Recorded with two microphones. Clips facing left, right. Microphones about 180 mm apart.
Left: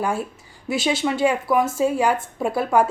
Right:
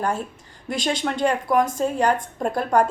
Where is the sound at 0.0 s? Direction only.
10° left (ahead or behind).